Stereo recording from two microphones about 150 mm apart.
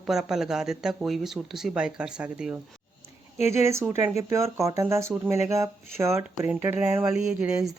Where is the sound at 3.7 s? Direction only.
15° right (ahead or behind).